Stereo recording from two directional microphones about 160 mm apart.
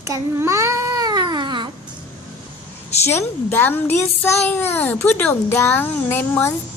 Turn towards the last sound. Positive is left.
turn(degrees=15)  # may be behind; listen again after turning